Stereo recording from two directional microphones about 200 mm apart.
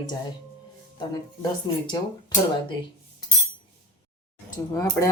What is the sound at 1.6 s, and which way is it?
Speech, 20° left (ahead or behind).